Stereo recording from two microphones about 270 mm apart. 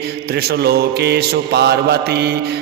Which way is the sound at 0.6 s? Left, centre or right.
Right.